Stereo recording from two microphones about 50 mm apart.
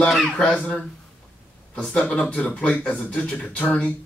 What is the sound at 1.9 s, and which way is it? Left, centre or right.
A man's voice, left.